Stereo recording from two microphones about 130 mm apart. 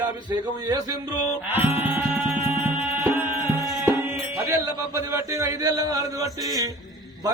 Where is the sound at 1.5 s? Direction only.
15° right (ahead or behind).